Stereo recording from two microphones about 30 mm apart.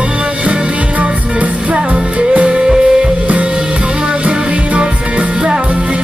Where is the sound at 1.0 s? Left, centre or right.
Right.